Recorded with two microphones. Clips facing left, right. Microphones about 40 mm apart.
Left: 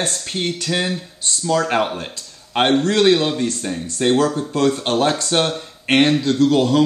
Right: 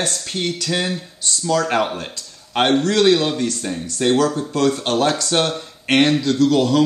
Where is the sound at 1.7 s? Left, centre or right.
Centre.